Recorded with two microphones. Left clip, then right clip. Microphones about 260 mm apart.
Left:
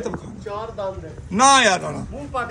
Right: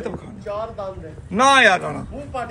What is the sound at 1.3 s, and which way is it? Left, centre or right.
Speech, centre.